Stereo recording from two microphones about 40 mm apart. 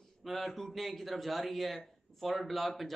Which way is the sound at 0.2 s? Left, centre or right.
Centre.